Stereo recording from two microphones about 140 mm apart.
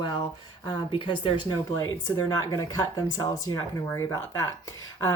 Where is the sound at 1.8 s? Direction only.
25° left (ahead or behind).